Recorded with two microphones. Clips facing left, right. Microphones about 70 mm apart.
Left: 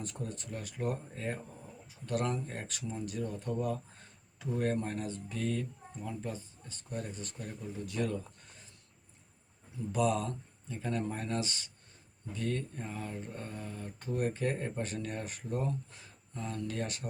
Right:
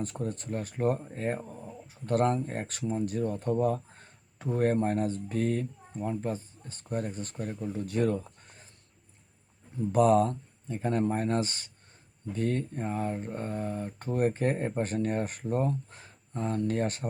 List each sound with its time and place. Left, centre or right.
0.0 s speech: right
9.7 s speech: right